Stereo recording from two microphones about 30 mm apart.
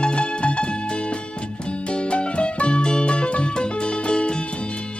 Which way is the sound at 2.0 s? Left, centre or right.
Left.